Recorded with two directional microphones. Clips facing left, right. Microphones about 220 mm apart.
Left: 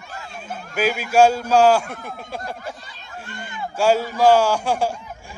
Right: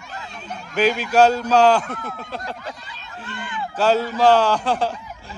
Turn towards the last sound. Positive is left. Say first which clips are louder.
# even
turn(degrees=10)  # may be behind; listen again after turning